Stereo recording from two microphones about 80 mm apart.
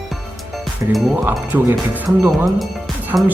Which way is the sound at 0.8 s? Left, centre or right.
Right.